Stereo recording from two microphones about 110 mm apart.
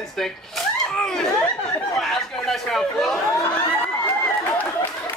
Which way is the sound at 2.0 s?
Centre (ahead or behind).